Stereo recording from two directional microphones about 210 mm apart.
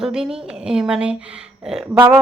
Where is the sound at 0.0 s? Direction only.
5° right (ahead or behind).